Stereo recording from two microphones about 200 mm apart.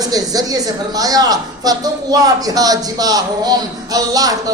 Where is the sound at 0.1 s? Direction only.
20° right (ahead or behind).